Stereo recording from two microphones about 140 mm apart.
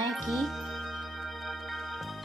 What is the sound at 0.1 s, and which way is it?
Music, centre (ahead or behind).